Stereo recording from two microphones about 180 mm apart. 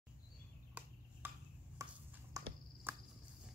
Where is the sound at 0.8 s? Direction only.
10° right (ahead or behind).